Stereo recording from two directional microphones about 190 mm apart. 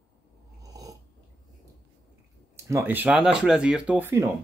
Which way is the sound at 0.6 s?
20° right (ahead or behind).